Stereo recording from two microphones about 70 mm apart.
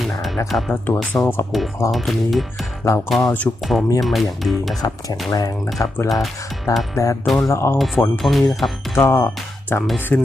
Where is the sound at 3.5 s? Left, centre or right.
Left.